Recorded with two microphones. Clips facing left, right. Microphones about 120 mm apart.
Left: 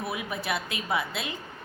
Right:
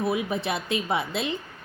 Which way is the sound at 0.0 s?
25° right (ahead or behind).